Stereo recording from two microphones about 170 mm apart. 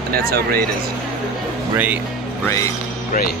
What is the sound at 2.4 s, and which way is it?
Speech, 20° left (ahead or behind).